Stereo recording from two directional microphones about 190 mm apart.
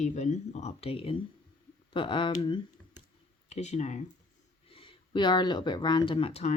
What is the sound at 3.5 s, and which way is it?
Speech, 35° left (ahead or behind).